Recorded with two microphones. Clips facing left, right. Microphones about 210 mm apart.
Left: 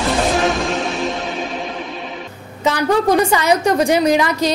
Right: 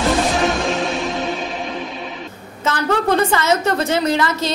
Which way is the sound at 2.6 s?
10° left (ahead or behind).